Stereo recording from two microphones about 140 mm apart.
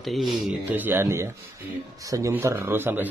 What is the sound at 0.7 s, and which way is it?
Speech, 15° right (ahead or behind).